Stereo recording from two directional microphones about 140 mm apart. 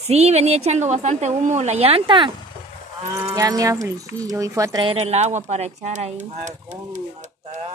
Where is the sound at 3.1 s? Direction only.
25° right (ahead or behind).